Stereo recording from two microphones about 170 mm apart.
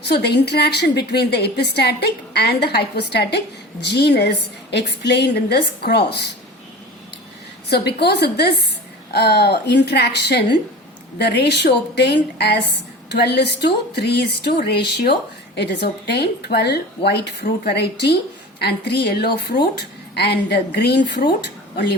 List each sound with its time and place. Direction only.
0.0 s a woman's voice: 75° left (ahead or behind)
7.7 s a woman's voice: 75° left (ahead or behind)